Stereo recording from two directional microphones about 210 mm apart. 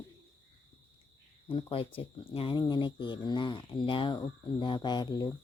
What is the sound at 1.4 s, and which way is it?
Speech, 25° left (ahead or behind).